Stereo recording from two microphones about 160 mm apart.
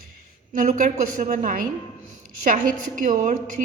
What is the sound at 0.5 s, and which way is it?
A woman's voice, 55° right (ahead or behind).